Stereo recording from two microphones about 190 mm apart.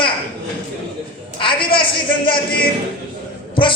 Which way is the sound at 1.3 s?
25° left (ahead or behind).